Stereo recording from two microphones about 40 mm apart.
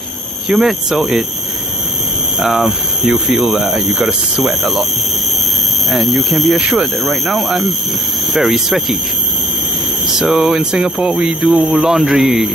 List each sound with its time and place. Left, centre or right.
0.5 s speech: centre
2.4 s speech: centre
5.9 s speech: centre
10.1 s speech: centre
10.6 s speech: centre